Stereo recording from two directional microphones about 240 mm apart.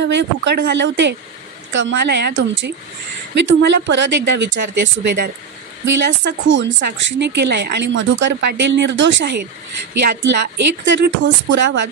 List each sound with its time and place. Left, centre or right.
0.0 s a woman's voice: right